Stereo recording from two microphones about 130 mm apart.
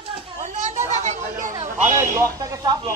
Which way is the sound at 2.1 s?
30° right (ahead or behind).